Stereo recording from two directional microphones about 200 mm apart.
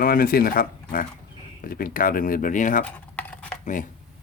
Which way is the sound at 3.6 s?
40° left (ahead or behind).